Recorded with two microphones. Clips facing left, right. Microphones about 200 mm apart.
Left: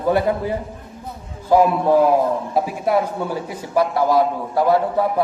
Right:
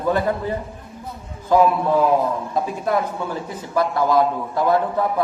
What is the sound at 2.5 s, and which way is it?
A man's voice, 10° left (ahead or behind).